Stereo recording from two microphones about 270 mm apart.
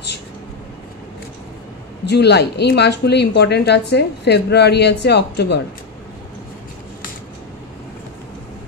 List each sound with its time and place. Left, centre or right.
2.0 s a woman's voice: left